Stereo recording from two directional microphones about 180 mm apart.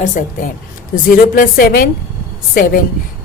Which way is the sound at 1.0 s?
50° left (ahead or behind).